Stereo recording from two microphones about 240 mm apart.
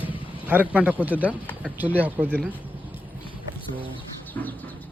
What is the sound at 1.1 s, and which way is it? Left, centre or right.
Speech, centre.